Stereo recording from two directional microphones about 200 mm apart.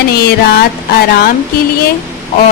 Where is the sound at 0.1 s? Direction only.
50° left (ahead or behind).